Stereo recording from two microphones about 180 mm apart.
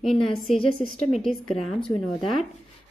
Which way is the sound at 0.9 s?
Centre (ahead or behind).